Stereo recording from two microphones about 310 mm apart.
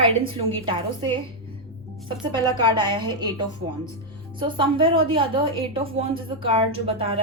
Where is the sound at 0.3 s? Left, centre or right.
Centre.